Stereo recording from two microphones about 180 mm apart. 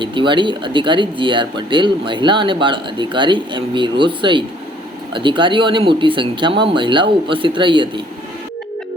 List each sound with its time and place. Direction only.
0.0 s speech: 25° right (ahead or behind)